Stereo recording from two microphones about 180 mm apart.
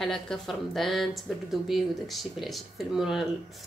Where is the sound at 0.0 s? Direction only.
Centre (ahead or behind).